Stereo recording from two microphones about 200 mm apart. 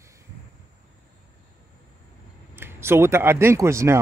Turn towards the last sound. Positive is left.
turn(degrees=-15)  # may be behind; listen again after turning